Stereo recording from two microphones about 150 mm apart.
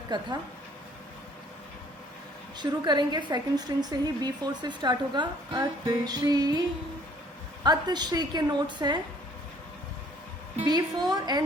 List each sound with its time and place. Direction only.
0.1 s a woman's voice: 30° right (ahead or behind)
2.6 s a woman's voice: 30° right (ahead or behind)
7.6 s a woman's voice: 30° right (ahead or behind)
10.7 s a woman's voice: 25° right (ahead or behind)